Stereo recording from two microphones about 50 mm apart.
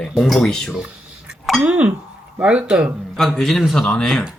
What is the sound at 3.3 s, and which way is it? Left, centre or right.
Frying, centre.